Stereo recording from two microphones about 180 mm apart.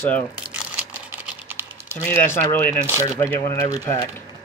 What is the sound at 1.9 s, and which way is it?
Speech, 15° left (ahead or behind).